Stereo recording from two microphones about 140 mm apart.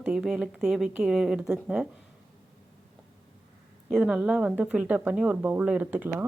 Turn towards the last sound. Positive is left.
turn(degrees=-10)  # may be behind; listen again after turning